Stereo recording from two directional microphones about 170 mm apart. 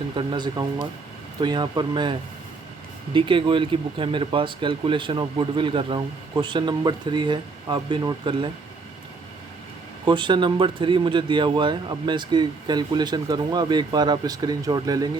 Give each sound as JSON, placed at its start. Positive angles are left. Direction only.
{"t": 0.2, "sound": "speech", "side_deg": -25}
{"t": 10.1, "sound": "speech", "side_deg": -30}